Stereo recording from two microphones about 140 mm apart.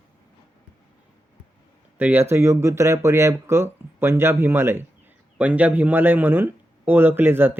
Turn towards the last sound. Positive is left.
turn(degrees=-15)  # may be behind; listen again after turning